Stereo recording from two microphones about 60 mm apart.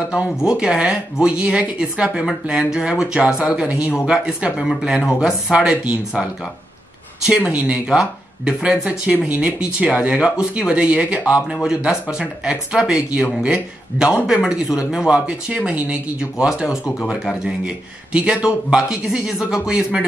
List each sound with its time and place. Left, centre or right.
0.1 s speech: centre
7.3 s speech: centre